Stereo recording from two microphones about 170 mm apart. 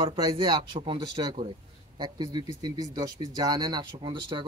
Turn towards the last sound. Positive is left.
turn(degrees=-30)  # may be behind; listen again after turning